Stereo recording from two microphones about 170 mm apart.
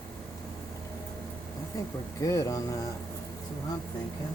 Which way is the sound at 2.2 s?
20° left (ahead or behind).